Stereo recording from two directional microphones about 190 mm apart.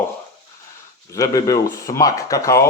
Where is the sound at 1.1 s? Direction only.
20° left (ahead or behind).